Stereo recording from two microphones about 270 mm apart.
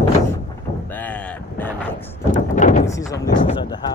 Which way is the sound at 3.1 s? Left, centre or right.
Centre.